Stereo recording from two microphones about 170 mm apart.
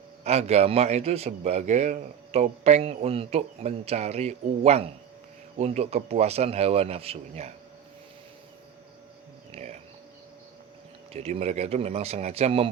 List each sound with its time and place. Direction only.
0.3 s a man's voice: 40° right (ahead or behind)
9.6 s a man's voice: 35° right (ahead or behind)
11.1 s a man's voice: 40° right (ahead or behind)